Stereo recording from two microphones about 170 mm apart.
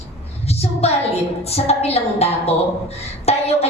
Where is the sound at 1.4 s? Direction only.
35° left (ahead or behind).